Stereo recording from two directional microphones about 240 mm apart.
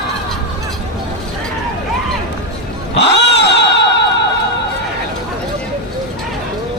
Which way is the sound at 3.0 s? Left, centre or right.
Left.